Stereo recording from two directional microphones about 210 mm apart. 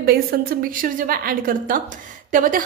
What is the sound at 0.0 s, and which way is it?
A woman's voice, 45° right (ahead or behind).